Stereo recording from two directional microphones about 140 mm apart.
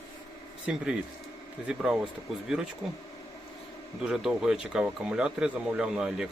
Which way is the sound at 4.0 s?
5° right (ahead or behind).